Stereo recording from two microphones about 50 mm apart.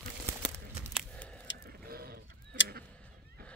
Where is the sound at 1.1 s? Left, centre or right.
Left.